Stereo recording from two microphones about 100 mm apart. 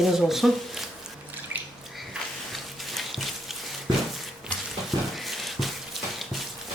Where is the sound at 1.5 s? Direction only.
20° right (ahead or behind).